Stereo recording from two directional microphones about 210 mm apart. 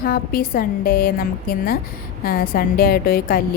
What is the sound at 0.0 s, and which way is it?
Speech, 45° left (ahead or behind).